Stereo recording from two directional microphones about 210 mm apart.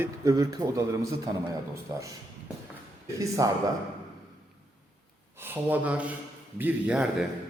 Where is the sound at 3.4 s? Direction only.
15° right (ahead or behind).